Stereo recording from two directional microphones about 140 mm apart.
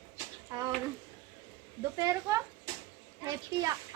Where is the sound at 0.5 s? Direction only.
25° right (ahead or behind).